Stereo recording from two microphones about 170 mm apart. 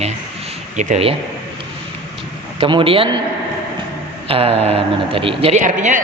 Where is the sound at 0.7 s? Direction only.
40° right (ahead or behind).